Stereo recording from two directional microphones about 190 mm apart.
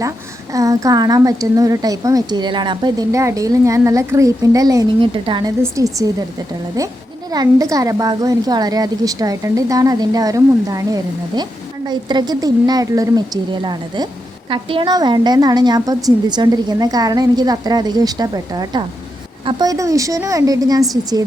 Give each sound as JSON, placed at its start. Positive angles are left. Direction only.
{"t": 0.5, "sound": "a woman's voice", "side_deg": -20}